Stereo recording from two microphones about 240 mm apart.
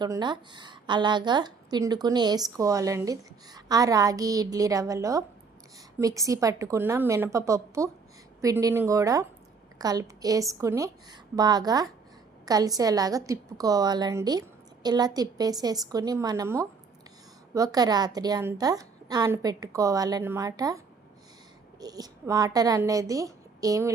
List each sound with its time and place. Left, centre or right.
0.0 s a woman's voice: centre